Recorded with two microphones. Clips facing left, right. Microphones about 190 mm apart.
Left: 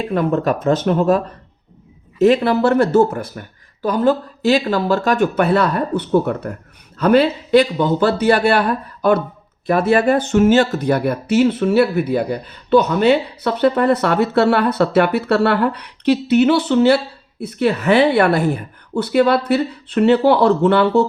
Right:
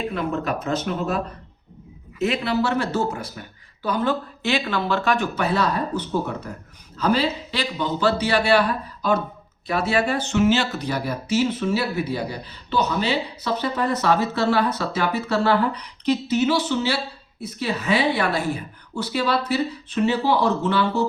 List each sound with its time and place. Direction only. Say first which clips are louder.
0.1 s speech: left 8 dB; 50° left (ahead or behind)
2.2 s speech: left 9 dB; 50° left (ahead or behind)